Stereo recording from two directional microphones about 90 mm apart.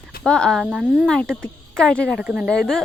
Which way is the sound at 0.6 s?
10° right (ahead or behind).